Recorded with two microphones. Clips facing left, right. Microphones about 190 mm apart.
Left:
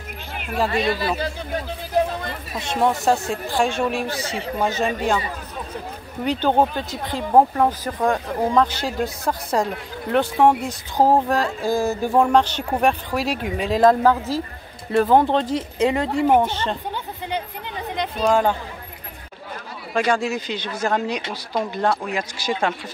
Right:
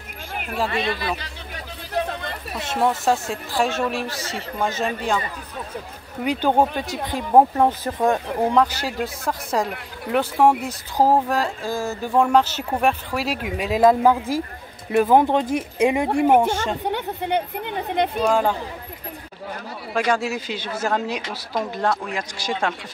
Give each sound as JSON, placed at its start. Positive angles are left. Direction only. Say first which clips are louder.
{"t": 0.7, "sound": "speech", "louder": "left 5 dB", "side_deg": 40}
{"t": 2.7, "sound": "speech", "louder": "left 1 dB", "side_deg": 0}
{"t": 6.2, "sound": "speech", "louder": "even", "side_deg": -10}
{"t": 8.5, "sound": "speech", "louder": "even", "side_deg": -5}
{"t": 11.6, "sound": "music", "louder": "left 5 dB", "side_deg": 15}
{"t": 12.2, "sound": "speech", "louder": "even", "side_deg": -5}
{"t": 16.8, "sound": "speech", "louder": "right 5 dB", "side_deg": -65}
{"t": 18.2, "sound": "speech", "louder": "left 3 dB", "side_deg": 0}
{"t": 19.9, "sound": "speech", "louder": "left 1 dB", "side_deg": -5}